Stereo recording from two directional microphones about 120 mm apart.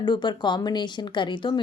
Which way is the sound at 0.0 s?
40° left (ahead or behind).